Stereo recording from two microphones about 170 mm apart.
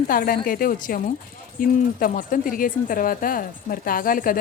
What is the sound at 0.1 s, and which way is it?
A woman's voice, 55° left (ahead or behind).